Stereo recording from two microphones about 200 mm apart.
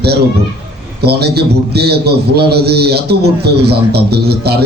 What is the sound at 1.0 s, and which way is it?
A man's voice, 55° right (ahead or behind).